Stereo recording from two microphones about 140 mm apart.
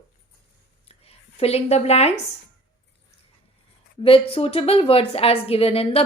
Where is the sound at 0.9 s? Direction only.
45° left (ahead or behind).